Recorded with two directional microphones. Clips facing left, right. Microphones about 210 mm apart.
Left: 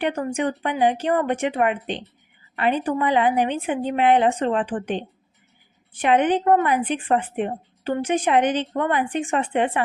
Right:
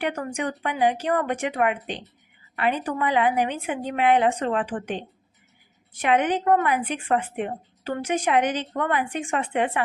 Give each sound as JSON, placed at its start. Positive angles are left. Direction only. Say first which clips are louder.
{"t": 0.0, "sound": "a woman's voice", "louder": "left 4 dB", "side_deg": 30}